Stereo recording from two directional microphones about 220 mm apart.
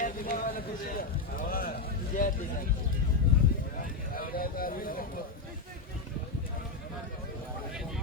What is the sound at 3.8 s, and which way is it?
Vehicle, 40° left (ahead or behind).